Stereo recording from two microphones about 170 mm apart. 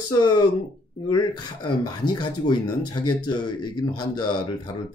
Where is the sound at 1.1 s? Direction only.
25° left (ahead or behind).